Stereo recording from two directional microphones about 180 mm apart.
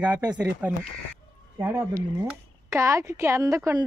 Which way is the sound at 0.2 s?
5° right (ahead or behind).